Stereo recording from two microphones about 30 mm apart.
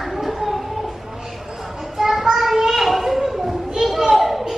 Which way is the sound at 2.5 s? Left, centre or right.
Centre.